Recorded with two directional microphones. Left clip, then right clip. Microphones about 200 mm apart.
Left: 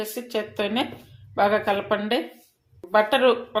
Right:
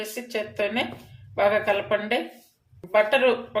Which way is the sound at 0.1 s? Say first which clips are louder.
Left 1 dB; 30° left (ahead or behind).